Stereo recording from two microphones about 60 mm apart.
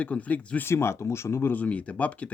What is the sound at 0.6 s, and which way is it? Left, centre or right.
Speech, left.